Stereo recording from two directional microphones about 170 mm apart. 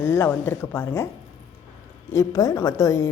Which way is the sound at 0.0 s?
15° left (ahead or behind).